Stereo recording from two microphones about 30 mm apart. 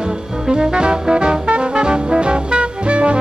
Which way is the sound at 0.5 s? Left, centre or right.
Right.